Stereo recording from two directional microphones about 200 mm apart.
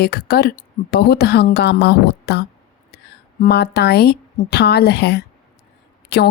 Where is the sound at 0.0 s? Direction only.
55° left (ahead or behind).